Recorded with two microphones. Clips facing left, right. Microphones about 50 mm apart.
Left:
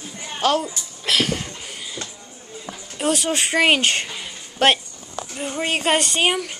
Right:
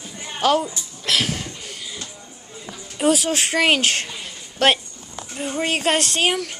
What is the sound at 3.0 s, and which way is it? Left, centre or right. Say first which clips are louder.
A child's voice: right 2 dB; centre.